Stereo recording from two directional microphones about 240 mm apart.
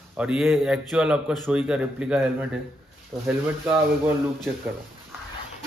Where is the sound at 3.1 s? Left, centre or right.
Centre.